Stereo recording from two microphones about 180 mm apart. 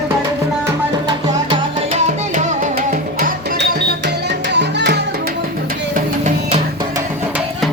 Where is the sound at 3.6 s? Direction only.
70° right (ahead or behind).